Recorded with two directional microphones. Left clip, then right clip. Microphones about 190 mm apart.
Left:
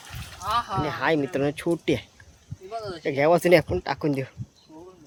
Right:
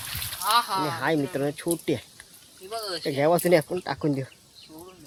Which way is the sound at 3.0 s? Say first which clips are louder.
Left 3 dB; 30° left (ahead or behind).